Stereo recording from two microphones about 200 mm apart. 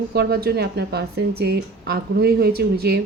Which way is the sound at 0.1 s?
50° right (ahead or behind).